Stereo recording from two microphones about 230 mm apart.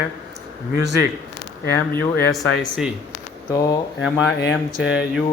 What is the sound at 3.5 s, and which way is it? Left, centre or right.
Speech, centre.